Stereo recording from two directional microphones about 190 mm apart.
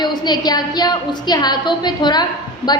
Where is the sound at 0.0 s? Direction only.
20° left (ahead or behind).